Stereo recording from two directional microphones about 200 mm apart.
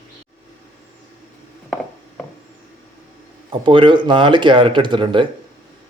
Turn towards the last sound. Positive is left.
turn(degrees=-25)  # may be behind; listen again after turning